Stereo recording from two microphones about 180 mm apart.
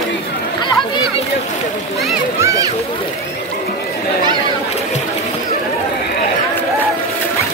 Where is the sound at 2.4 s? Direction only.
15° right (ahead or behind).